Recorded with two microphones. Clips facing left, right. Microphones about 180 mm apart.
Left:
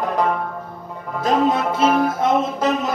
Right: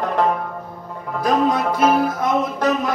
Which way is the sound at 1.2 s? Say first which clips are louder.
Even; 25° left (ahead or behind).